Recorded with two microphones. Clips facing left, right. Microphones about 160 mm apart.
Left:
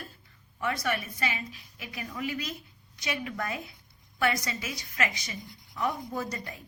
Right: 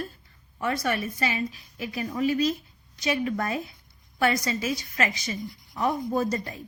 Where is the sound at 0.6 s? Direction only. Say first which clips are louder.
Right 4 dB; 35° right (ahead or behind).